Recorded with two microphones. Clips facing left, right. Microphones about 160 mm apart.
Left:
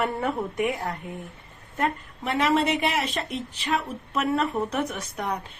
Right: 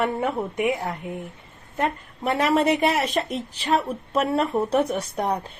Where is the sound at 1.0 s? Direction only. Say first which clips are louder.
Right 4 dB; 20° right (ahead or behind).